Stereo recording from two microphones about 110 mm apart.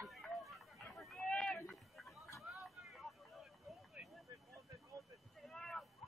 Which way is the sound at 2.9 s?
Centre (ahead or behind).